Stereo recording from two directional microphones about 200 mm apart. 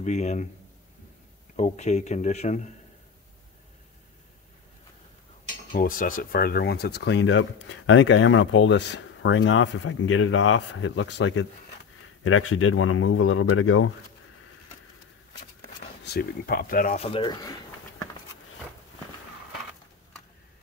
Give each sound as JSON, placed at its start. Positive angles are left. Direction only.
{"t": 0.0, "sound": "speech", "side_deg": 35}
{"t": 1.6, "sound": "speech", "side_deg": 35}
{"t": 5.7, "sound": "speech", "side_deg": 45}
{"t": 12.2, "sound": "speech", "side_deg": 90}
{"t": 16.0, "sound": "speech", "side_deg": 55}
{"t": 17.1, "sound": "a sound", "side_deg": 20}